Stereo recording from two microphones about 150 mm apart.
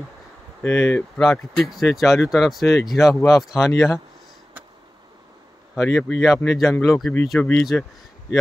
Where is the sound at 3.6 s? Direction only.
20° left (ahead or behind).